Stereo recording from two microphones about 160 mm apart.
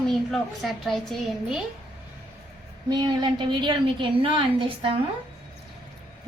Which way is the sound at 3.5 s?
30° right (ahead or behind).